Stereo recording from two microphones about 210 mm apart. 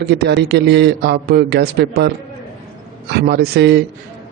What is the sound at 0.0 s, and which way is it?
Speech, 50° right (ahead or behind).